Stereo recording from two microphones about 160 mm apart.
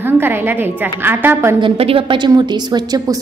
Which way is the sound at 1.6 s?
35° right (ahead or behind).